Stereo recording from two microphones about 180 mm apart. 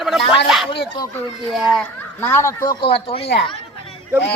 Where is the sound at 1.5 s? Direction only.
Centre (ahead or behind).